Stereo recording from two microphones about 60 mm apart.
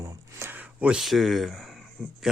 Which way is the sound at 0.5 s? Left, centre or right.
Right.